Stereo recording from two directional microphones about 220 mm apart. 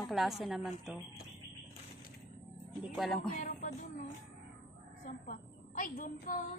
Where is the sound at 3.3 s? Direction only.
35° left (ahead or behind).